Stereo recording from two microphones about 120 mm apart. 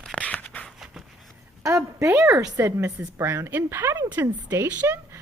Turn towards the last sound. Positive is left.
turn(degrees=-20)  # may be behind; listen again after turning